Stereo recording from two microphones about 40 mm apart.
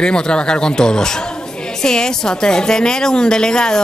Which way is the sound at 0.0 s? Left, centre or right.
Left.